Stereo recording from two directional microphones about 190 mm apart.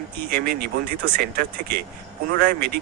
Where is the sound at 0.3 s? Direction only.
55° right (ahead or behind).